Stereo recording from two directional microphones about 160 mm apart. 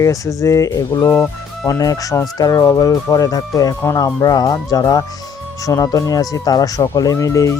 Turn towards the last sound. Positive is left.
turn(degrees=20)  # may be behind; listen again after turning